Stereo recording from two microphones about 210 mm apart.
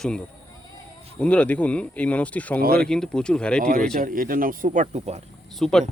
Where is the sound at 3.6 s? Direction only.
40° right (ahead or behind).